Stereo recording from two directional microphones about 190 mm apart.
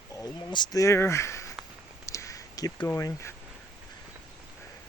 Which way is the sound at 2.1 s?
15° left (ahead or behind).